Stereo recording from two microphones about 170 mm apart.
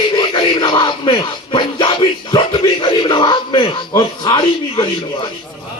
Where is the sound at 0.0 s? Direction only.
25° left (ahead or behind).